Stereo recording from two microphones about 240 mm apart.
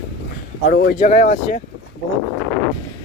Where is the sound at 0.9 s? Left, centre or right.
Left.